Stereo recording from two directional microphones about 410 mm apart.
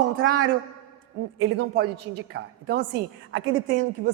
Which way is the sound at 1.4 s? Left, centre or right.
Right.